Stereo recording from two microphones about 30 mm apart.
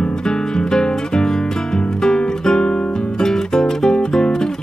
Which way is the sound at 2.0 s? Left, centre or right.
Left.